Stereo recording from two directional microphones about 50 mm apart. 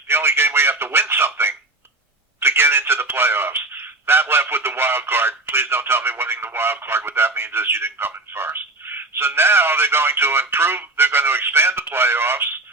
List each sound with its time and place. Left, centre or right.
0.1 s a man's voice: right
2.4 s telephone: right
4.0 s speech: right